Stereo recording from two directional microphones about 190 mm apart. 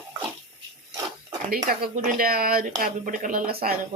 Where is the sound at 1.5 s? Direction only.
50° right (ahead or behind).